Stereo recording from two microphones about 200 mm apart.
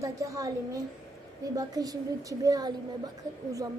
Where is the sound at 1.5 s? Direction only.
20° right (ahead or behind).